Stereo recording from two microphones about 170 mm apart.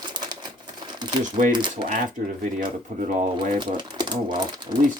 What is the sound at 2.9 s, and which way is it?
Speech, 50° right (ahead or behind).